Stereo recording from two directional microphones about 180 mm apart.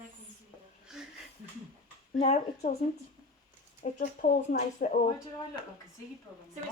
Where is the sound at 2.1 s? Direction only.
35° left (ahead or behind).